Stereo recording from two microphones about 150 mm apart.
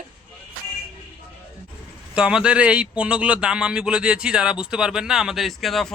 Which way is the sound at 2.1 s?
5° right (ahead or behind).